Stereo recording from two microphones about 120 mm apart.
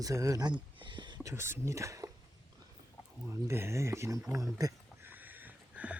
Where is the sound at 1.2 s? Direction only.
20° right (ahead or behind).